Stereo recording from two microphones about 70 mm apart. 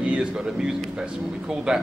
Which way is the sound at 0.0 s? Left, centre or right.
Centre.